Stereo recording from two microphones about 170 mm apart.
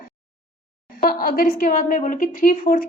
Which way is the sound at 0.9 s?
60° left (ahead or behind).